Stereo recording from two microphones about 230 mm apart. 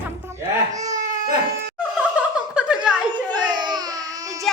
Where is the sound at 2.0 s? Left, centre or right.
Centre.